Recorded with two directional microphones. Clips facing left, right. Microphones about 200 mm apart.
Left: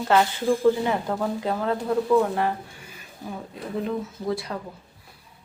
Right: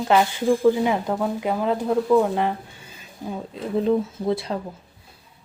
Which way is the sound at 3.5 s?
25° right (ahead or behind).